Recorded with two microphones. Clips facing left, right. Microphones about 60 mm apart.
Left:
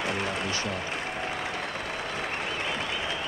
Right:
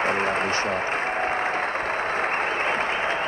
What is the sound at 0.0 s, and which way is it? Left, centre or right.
Applause, right.